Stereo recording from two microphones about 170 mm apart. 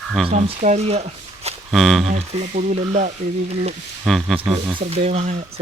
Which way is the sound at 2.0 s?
45° right (ahead or behind).